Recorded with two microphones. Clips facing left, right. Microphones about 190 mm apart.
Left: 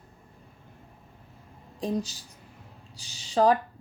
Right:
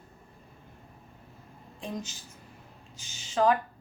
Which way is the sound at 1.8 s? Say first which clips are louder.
Left 8 dB; 35° left (ahead or behind).